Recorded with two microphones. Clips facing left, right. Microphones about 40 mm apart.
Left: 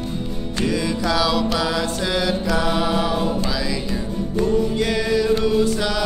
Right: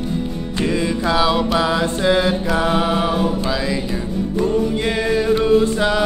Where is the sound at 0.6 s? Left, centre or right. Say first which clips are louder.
Right 2 dB; right.